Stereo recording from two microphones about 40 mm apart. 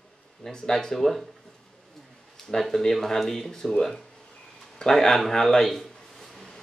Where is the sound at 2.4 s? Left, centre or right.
Centre.